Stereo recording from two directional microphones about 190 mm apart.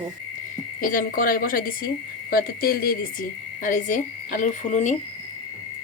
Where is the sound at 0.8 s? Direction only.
45° left (ahead or behind).